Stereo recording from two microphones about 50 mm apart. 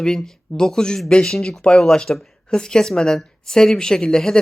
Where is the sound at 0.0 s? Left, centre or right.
Centre.